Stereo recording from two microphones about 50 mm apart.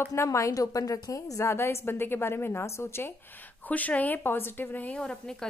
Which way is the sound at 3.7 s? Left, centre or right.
Left.